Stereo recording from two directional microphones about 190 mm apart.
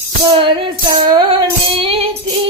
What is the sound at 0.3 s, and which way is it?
Music, 25° right (ahead or behind).